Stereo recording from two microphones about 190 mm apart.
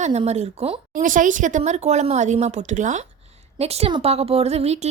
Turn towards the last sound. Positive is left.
turn(degrees=-35)  # may be behind; listen again after turning